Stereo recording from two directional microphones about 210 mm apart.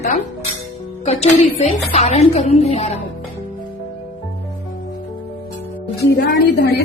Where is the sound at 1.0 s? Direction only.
30° left (ahead or behind).